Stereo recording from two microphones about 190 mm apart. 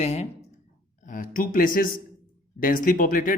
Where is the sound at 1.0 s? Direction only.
45° left (ahead or behind).